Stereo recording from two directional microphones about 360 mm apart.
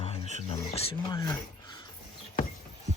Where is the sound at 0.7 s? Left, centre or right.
Centre.